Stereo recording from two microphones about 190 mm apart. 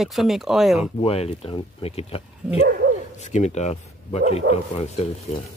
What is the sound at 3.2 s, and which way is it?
Speech, 35° left (ahead or behind).